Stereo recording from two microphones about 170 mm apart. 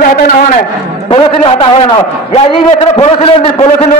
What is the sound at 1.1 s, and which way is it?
A man's voice, 30° left (ahead or behind).